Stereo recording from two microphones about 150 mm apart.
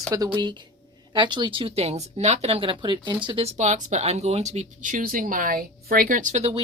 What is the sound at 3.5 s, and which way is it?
Speech, 50° right (ahead or behind).